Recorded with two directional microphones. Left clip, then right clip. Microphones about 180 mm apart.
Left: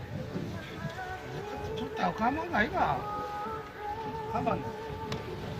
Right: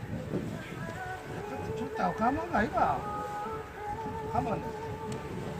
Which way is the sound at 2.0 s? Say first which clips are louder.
Even; 40° left (ahead or behind).